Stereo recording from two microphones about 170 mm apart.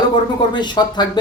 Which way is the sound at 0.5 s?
25° left (ahead or behind).